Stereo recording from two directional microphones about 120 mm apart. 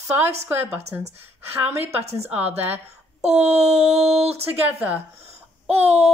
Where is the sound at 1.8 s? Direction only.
60° right (ahead or behind).